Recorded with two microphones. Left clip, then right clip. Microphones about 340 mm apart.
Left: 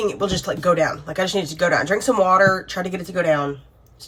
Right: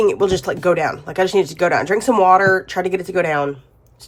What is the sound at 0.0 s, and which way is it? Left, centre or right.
Speech, right.